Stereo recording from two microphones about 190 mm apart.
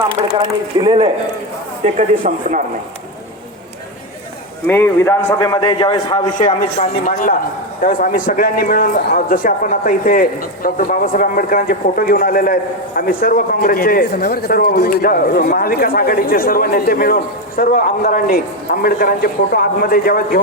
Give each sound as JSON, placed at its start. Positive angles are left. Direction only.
{"t": 0.3, "sound": "speech", "side_deg": -25}
{"t": 1.8, "sound": "speech", "side_deg": -40}
{"t": 4.6, "sound": "a man's voice", "side_deg": 10}